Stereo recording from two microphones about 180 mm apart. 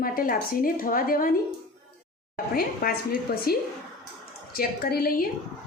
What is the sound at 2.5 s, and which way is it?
A woman's voice, 55° left (ahead or behind).